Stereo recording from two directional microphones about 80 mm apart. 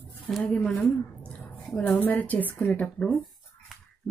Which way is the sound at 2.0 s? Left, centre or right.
Centre.